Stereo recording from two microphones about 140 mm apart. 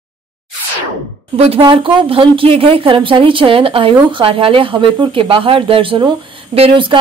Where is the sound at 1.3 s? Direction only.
45° right (ahead or behind).